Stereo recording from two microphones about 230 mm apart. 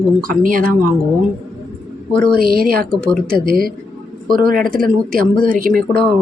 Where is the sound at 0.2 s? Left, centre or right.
Right.